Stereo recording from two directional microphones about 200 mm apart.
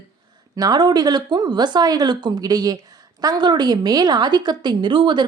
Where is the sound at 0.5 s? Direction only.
20° right (ahead or behind).